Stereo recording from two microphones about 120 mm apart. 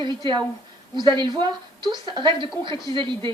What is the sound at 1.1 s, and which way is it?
A woman's voice, 40° right (ahead or behind).